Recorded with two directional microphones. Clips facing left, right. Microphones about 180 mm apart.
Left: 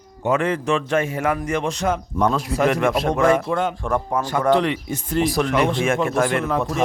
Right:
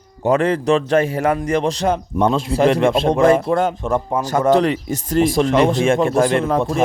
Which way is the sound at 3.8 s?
20° right (ahead or behind).